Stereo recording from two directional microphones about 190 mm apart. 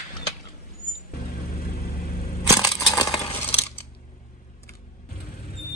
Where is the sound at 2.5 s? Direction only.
20° left (ahead or behind).